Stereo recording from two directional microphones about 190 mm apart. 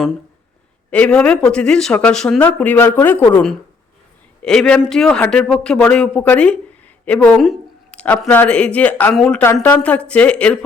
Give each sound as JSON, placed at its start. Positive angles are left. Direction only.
{"t": 0.9, "sound": "speech", "side_deg": 5}